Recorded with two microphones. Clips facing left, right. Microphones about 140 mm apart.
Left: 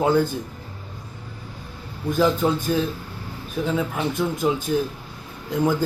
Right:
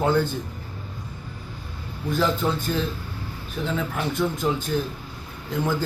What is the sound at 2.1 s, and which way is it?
Speech, 10° left (ahead or behind).